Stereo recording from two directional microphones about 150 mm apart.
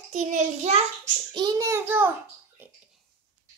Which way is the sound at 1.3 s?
30° right (ahead or behind).